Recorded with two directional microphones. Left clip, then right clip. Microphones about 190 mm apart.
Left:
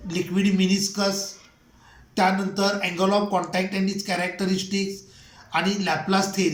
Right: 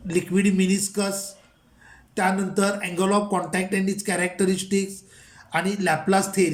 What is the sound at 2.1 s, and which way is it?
Speech, 35° right (ahead or behind).